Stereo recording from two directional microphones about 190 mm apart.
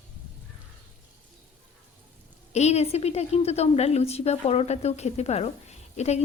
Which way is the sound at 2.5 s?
35° left (ahead or behind).